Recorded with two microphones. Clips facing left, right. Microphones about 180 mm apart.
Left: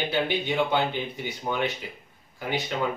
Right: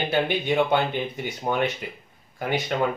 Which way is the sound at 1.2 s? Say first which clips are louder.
Right 3 dB; 55° right (ahead or behind).